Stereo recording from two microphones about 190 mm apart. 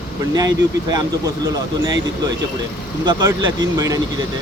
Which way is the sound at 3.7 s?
20° right (ahead or behind).